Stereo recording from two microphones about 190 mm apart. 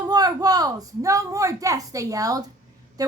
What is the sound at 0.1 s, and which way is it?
A woman's voice, 20° right (ahead or behind).